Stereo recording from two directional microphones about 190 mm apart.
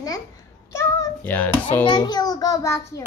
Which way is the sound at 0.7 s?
15° left (ahead or behind).